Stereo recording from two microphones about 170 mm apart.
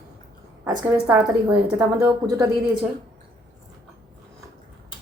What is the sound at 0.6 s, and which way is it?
A woman's voice, 15° right (ahead or behind).